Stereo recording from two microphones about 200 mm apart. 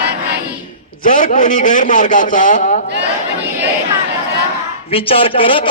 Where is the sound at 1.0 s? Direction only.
40° left (ahead or behind).